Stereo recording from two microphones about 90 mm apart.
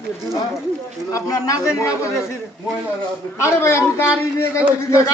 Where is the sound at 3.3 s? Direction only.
30° left (ahead or behind).